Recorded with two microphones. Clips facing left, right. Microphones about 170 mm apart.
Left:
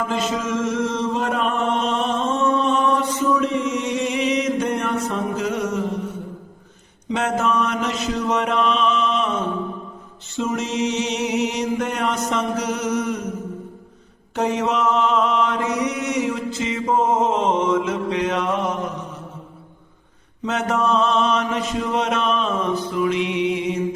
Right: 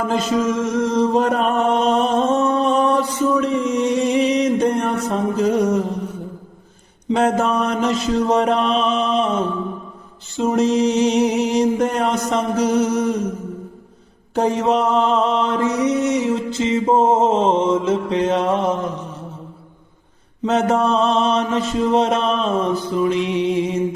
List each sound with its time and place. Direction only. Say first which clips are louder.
0.1 s chant: right 4 dB; 40° right (ahead or behind)
7.1 s mantra: right 4 dB; 35° right (ahead or behind)
10.3 s mantra: right 7 dB; 35° right (ahead or behind)
14.3 s mantra: right 4 dB; 35° right (ahead or behind)
20.4 s mantra: right 5 dB; 30° right (ahead or behind)